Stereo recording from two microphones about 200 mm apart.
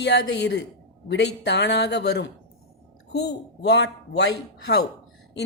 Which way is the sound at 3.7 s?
60° left (ahead or behind).